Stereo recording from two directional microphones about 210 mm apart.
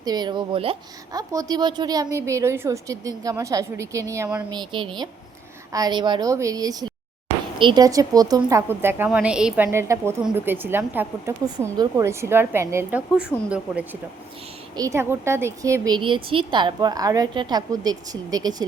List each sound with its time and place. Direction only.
0.0 s a woman's voice: 20° right (ahead or behind)
4.5 s a woman's voice: 25° right (ahead or behind); by 13.5 s centre (ahead or behind)
14.8 s a woman's voice: 15° right (ahead or behind)